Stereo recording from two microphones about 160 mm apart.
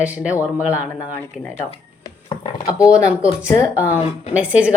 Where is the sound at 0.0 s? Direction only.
10° right (ahead or behind).